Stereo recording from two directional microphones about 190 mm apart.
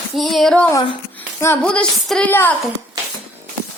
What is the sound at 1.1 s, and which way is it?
Speech, 10° left (ahead or behind).